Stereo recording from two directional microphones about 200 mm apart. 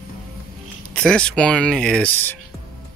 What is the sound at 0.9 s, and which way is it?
Speech, 5° left (ahead or behind).